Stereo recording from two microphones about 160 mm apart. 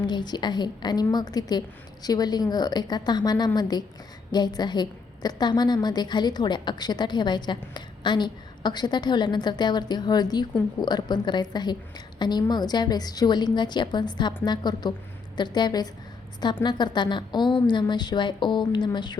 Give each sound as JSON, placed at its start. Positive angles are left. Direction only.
{"t": 0.0, "sound": "a woman's voice", "side_deg": 25}